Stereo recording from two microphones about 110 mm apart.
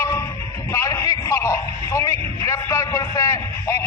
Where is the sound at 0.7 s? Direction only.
30° left (ahead or behind).